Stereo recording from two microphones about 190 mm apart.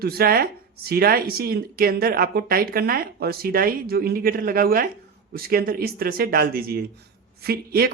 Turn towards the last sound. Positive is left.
turn(degrees=-55)  # may be behind; listen again after turning